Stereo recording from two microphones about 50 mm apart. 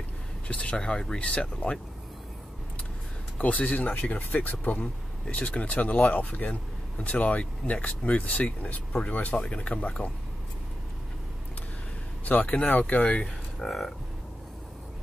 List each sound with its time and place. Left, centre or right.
0.5 s speech: left
3.3 s speech: left
6.5 s speech: left
12.3 s speech: left
13.6 s speech: centre